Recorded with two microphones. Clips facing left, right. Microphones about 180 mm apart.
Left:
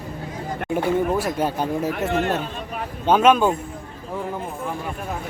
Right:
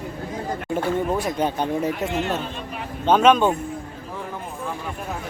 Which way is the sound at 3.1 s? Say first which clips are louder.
Even; 5° left (ahead or behind).